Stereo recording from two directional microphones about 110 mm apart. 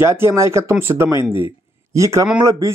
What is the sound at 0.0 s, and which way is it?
Speech, 25° right (ahead or behind).